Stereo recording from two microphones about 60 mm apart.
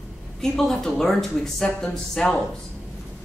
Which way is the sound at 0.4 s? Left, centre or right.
Centre.